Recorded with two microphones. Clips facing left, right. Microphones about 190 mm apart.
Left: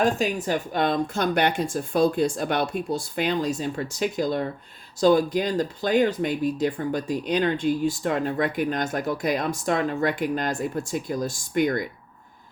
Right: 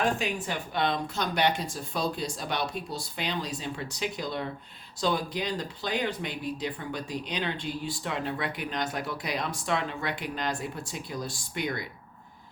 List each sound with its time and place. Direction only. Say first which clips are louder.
0.0 s speech: left 6 dB; 45° left (ahead or behind)